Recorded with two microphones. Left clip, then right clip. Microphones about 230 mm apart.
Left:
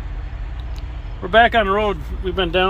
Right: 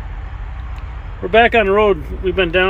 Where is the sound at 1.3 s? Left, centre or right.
Centre.